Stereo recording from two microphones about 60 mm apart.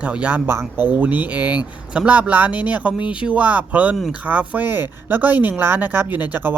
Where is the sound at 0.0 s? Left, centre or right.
Right.